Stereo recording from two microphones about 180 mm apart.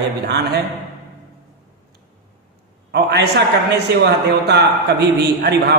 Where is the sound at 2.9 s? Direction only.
70° right (ahead or behind).